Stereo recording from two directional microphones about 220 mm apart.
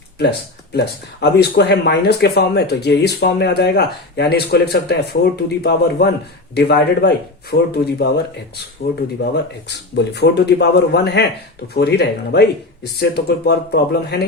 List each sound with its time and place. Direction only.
0.2 s speech: 50° left (ahead or behind)
7.5 s speech: 40° left (ahead or behind)